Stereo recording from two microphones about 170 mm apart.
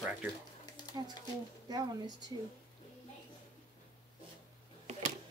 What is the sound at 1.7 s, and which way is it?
Speech, 25° right (ahead or behind).